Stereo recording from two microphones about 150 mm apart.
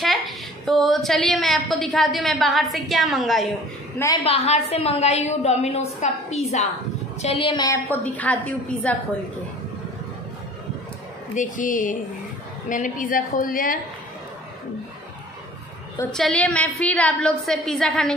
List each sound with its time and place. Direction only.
0.7 s a woman's voice: centre (ahead or behind)
4.2 s a woman's voice: 45° left (ahead or behind); by 7.8 s 25° left (ahead or behind)
7.9 s a woman's voice: 10° left (ahead or behind)
11.3 s a woman's voice: 60° left (ahead or behind)
16.1 s a woman's voice: 5° left (ahead or behind)